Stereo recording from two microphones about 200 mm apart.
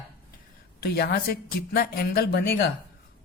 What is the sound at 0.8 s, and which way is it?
A man's voice, 50° left (ahead or behind).